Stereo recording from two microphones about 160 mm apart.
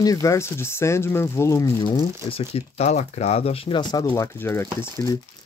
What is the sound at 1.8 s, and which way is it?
Speech, 30° left (ahead or behind).